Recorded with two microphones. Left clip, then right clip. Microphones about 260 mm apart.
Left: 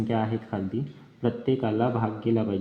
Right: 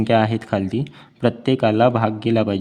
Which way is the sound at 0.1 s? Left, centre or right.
Right.